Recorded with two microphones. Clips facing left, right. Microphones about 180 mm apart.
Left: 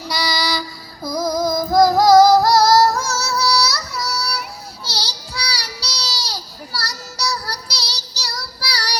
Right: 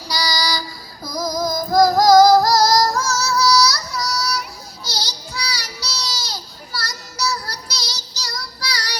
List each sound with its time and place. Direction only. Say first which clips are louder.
0.1 s child singing: left 1 dB; 25° left (ahead or behind)
1.0 s music: left 3 dB; 25° left (ahead or behind)
4.8 s child singing: right 1 dB; 30° left (ahead or behind)